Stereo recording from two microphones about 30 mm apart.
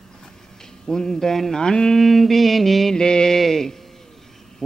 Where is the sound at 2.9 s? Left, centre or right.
Left.